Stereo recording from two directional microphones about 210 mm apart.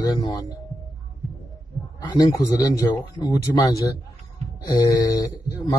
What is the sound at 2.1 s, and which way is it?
Speech, 20° left (ahead or behind).